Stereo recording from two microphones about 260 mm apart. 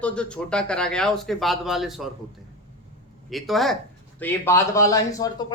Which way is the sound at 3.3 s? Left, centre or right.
Centre.